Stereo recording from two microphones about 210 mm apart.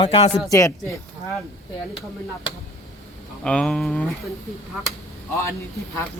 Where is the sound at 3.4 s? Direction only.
5° left (ahead or behind).